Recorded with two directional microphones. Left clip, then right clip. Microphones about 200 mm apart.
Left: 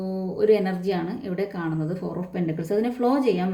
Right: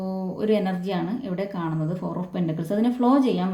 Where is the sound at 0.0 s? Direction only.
15° left (ahead or behind).